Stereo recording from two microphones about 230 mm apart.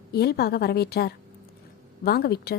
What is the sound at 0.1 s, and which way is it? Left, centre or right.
A woman's voice, left.